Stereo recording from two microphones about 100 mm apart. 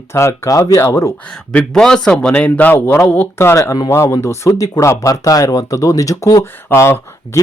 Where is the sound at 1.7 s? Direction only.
5° left (ahead or behind); by 6.5 s 35° left (ahead or behind).